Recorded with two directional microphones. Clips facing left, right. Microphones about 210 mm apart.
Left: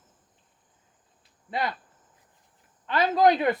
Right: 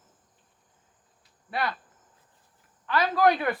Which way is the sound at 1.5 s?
20° left (ahead or behind).